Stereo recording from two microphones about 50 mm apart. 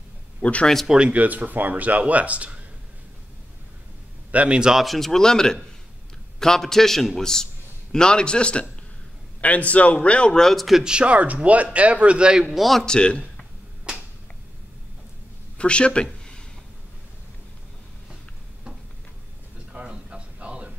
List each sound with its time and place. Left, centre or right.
0.4 s speech: left
0.9 s speech: right
4.3 s a man's voice: right
4.6 s speech: centre
4.8 s a man's voice: centre; by 10.4 s left
10.4 s speech: centre
10.8 s a man's voice: centre
12.4 s speech: centre
12.8 s a man's voice: centre
15.5 s a sound: left
19.7 s a sound: centre